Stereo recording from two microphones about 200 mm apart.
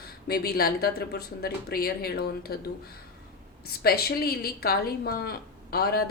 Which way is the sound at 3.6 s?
50° left (ahead or behind).